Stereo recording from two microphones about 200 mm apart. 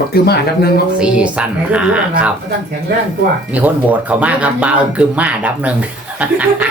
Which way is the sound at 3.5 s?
10° right (ahead or behind).